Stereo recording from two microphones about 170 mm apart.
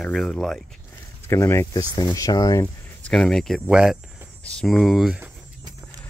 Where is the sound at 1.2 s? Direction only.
15° left (ahead or behind).